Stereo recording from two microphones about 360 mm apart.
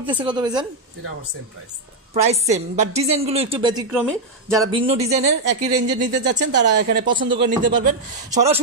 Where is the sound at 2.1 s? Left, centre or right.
Centre.